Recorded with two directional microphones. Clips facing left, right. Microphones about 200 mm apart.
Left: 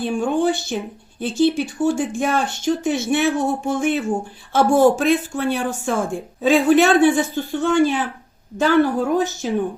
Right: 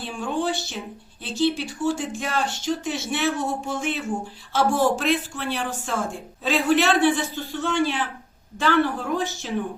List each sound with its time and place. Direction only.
0.0 s speech: 50° left (ahead or behind)